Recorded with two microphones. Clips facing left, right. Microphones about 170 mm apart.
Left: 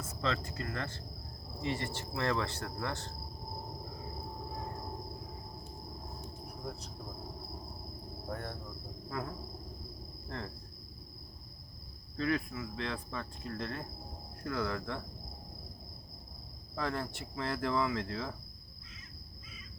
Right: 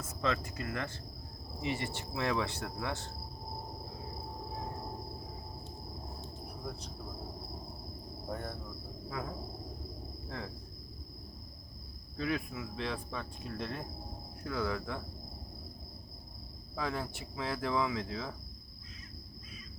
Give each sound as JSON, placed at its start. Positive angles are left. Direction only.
{"t": 0.2, "sound": "cricket", "side_deg": -10}
{"t": 10.2, "sound": "speech", "side_deg": -5}
{"t": 12.1, "sound": "cricket", "side_deg": -10}
{"t": 14.4, "sound": "speech", "side_deg": -5}
{"t": 16.7, "sound": "speech", "side_deg": -5}